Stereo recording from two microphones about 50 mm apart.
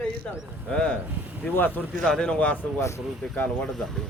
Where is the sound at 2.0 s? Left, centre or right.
Centre.